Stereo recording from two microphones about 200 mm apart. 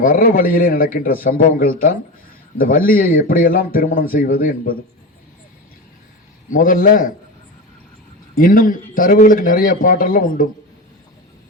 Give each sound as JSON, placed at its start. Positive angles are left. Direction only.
{"t": 0.0, "sound": "a man's voice", "side_deg": 45}
{"t": 6.5, "sound": "a man's voice", "side_deg": 45}
{"t": 8.4, "sound": "a man's voice", "side_deg": 45}